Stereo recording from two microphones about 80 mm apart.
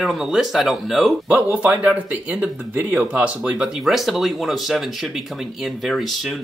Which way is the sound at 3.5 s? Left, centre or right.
Centre.